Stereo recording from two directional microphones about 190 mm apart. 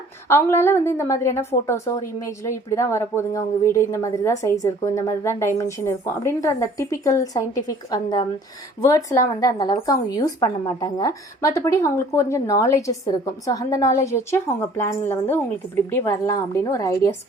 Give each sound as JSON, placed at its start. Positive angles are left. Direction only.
{"t": 0.3, "sound": "a woman's voice", "side_deg": 10}